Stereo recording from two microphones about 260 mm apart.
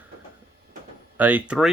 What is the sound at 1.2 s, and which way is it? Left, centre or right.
Speech, centre.